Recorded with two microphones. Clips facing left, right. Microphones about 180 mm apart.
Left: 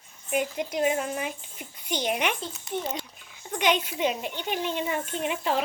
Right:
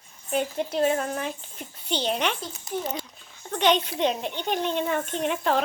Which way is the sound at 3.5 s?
10° left (ahead or behind).